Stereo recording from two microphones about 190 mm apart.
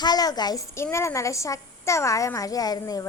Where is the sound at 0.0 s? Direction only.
20° left (ahead or behind).